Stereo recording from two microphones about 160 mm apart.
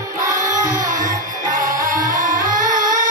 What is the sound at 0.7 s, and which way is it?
Music, 55° right (ahead or behind).